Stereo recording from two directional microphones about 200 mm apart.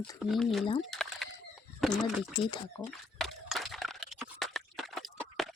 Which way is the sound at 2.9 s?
Centre (ahead or behind).